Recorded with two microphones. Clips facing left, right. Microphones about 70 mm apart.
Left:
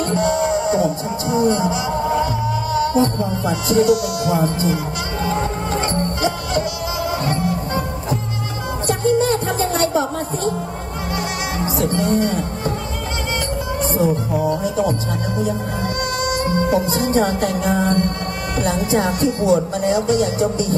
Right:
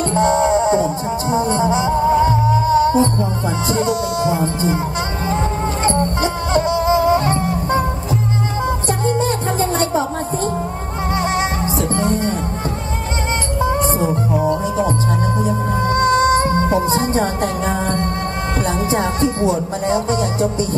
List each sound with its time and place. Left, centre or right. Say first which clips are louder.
0.1 s music: right 5 dB; right
8.8 s music: left 5 dB; right
11.8 s music: left 2 dB; right
13.8 s music: right 1 dB; right
18.6 s speech: left 1 dB; right